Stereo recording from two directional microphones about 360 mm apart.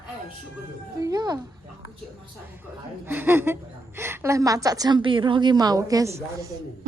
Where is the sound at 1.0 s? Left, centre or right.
Centre.